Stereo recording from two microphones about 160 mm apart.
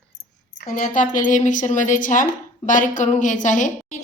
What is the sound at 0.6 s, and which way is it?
A woman's voice, 60° left (ahead or behind).